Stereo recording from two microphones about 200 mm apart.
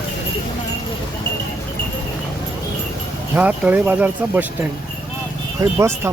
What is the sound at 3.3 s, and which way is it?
Speech, 5° right (ahead or behind).